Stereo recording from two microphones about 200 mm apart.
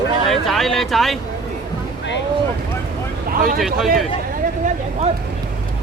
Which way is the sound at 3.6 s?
Centre (ahead or behind).